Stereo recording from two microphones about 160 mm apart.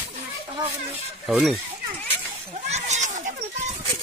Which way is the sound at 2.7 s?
45° right (ahead or behind).